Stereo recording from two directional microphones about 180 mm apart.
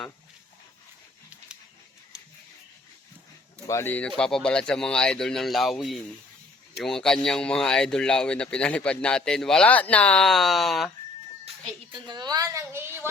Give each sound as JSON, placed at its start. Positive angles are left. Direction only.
{"t": 3.7, "sound": "speech", "side_deg": 15}
{"t": 11.4, "sound": "a woman's voice", "side_deg": -30}